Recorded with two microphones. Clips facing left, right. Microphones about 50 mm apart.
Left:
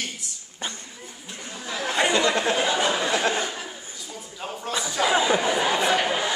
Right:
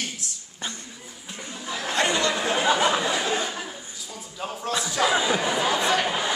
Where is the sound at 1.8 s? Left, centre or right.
Centre.